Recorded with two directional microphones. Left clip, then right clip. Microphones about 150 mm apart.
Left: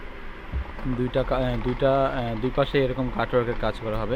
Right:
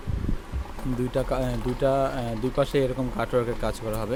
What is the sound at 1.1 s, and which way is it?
Speech, 15° right (ahead or behind).